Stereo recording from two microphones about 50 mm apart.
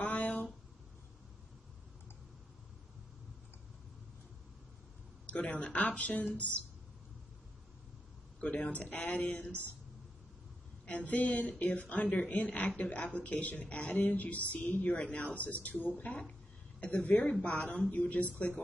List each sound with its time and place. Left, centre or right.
0.0 s a sound: left
5.2 s a woman's voice: left
8.4 s a woman's voice: left
10.9 s a woman's voice: left